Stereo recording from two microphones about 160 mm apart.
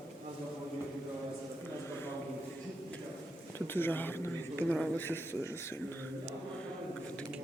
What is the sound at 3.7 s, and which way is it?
Speech, 15° left (ahead or behind).